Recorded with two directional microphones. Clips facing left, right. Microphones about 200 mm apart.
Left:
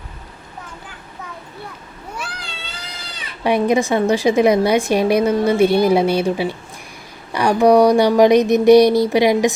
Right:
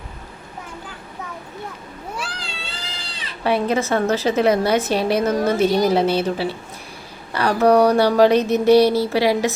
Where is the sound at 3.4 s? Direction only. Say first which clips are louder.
Left 4 dB; 15° left (ahead or behind).